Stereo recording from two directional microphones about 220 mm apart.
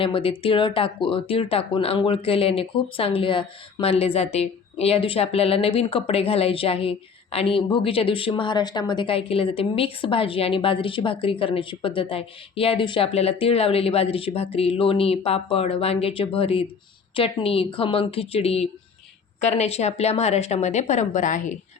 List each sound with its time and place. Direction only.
0.0 s a woman's voice: 25° left (ahead or behind)